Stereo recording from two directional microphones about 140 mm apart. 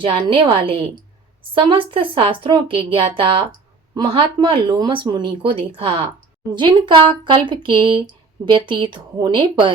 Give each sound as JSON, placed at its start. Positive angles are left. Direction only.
{"t": 0.0, "sound": "speech", "side_deg": -40}